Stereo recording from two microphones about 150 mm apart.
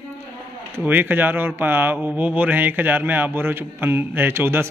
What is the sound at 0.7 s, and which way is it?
Speech, 15° right (ahead or behind).